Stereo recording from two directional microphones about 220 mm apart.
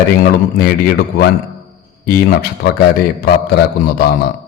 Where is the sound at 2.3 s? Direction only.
45° left (ahead or behind).